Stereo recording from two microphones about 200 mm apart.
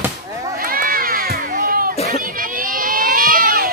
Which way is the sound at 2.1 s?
45° right (ahead or behind).